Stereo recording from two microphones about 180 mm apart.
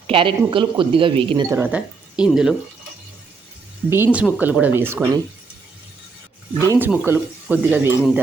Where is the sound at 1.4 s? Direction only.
15° right (ahead or behind).